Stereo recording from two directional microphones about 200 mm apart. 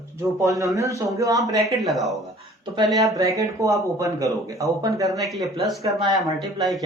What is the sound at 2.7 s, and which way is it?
Speech, 15° right (ahead or behind).